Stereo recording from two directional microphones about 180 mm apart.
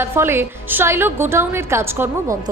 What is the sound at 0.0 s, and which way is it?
A woman's voice, 15° right (ahead or behind).